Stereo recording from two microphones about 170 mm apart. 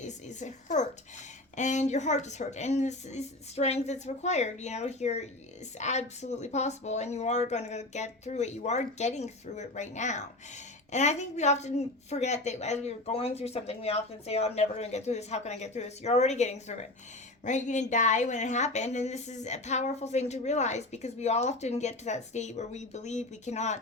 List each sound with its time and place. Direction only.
0.0 s a woman's voice: 45° left (ahead or behind)